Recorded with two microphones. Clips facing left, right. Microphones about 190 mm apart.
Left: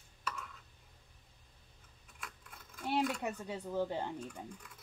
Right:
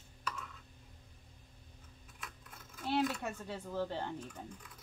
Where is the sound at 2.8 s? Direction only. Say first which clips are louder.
Even; 10° left (ahead or behind).